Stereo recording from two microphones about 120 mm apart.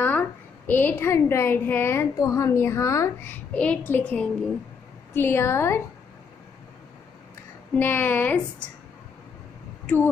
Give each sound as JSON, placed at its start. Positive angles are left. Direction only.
{"t": 0.0, "sound": "a woman's voice", "side_deg": 15}
{"t": 3.5, "sound": "a child's voice", "side_deg": 10}
{"t": 7.7, "sound": "a child's voice", "side_deg": 15}